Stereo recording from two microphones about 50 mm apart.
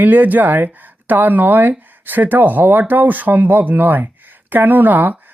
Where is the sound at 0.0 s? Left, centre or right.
Right.